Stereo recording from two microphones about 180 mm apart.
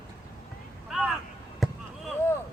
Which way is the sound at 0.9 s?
5° right (ahead or behind).